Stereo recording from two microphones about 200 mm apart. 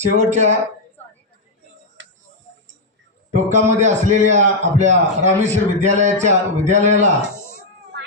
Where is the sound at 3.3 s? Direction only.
35° right (ahead or behind).